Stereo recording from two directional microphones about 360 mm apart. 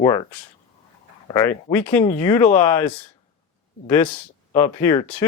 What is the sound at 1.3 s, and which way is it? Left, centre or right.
Speech, centre.